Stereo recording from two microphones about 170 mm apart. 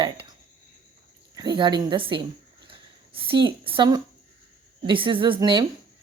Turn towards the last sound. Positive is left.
turn(degrees=-25)  # may be behind; listen again after turning